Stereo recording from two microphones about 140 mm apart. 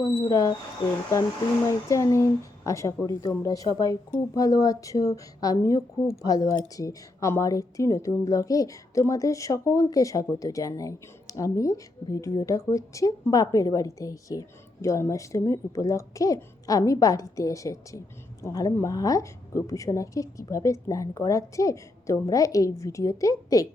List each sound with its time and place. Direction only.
0.0 s a woman's voice: 25° left (ahead or behind)
1.6 s a woman's voice: 20° left (ahead or behind)